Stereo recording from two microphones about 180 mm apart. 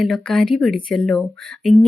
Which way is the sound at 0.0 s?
5° left (ahead or behind).